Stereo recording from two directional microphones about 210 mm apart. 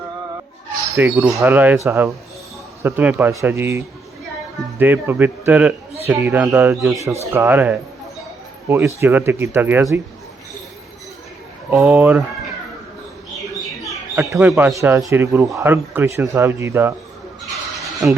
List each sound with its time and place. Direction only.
0.9 s speech: 10° right (ahead or behind)
11.7 s speech: 5° right (ahead or behind)
13.8 s bird: centre (ahead or behind)
14.8 s speech: 10° right (ahead or behind)